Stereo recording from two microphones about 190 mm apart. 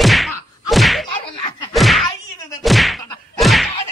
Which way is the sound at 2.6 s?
Centre (ahead or behind).